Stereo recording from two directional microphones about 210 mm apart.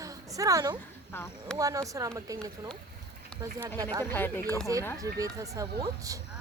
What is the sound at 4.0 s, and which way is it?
Speech, 10° left (ahead or behind).